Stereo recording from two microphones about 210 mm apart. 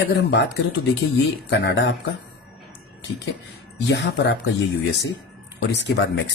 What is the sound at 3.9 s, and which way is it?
Speech, 55° left (ahead or behind).